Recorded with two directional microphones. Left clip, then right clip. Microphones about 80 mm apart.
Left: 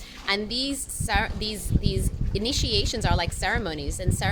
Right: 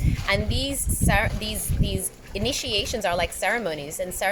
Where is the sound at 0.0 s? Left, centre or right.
Left.